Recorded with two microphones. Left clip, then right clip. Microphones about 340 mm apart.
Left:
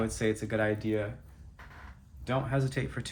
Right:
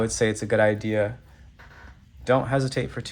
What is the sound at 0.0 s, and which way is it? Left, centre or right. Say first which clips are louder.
Speech: right 7 dB; centre.